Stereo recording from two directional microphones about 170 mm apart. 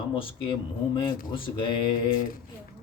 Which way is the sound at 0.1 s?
30° left (ahead or behind).